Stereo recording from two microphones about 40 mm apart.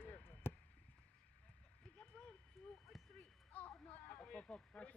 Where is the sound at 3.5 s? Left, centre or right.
Left.